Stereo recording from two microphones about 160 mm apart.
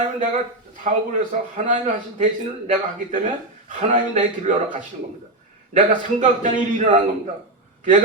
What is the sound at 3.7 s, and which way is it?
Speech, 50° right (ahead or behind).